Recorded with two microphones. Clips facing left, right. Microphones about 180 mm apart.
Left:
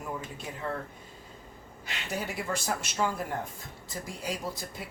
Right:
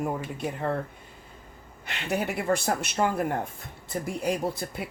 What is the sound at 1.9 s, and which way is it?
Speech, 60° right (ahead or behind).